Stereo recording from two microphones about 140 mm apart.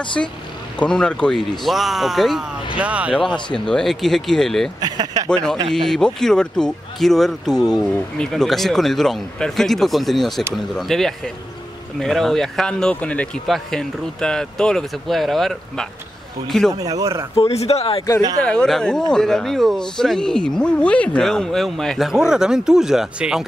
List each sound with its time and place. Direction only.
0.2 s speech: 5° left (ahead or behind)
3.3 s speech: 35° left (ahead or behind)
3.5 s speech: 5° left (ahead or behind)
4.7 s speech: 30° right (ahead or behind)
5.3 s speech: 5° left (ahead or behind)
16.7 s speech: 25° right (ahead or behind)
17.4 s speech: 50° left (ahead or behind)
18.4 s speech: 5° left (ahead or behind)